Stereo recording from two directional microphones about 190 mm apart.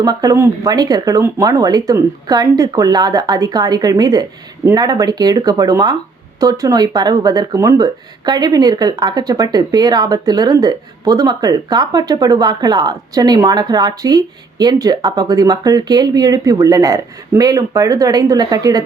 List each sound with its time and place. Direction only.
0.0 s speech: 20° right (ahead or behind)